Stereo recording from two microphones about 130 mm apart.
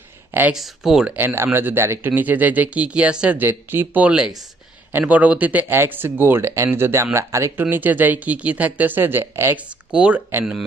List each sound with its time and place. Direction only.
0.3 s speech: 15° right (ahead or behind)
0.5 s speech: 5° right (ahead or behind)
1.1 s speech: 15° right (ahead or behind)